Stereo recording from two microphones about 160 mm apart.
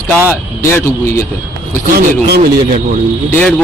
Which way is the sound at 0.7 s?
15° left (ahead or behind).